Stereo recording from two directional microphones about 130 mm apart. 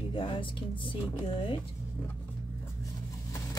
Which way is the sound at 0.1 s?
40° left (ahead or behind).